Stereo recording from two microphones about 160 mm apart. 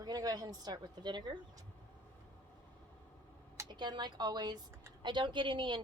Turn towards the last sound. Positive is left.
turn(degrees=-30)  # may be behind; listen again after turning